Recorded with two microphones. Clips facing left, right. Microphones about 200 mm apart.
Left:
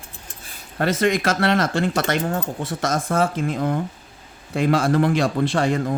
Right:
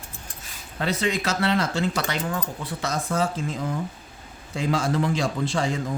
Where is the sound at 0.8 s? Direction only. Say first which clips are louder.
Left 5 dB; 55° left (ahead or behind).